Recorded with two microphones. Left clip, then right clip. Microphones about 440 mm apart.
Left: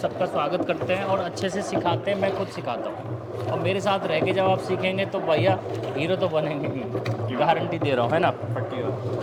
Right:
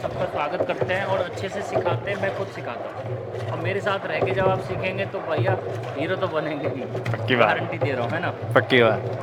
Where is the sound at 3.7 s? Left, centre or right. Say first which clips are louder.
Left 1 dB; left.